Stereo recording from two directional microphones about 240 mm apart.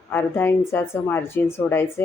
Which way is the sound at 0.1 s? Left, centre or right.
Centre.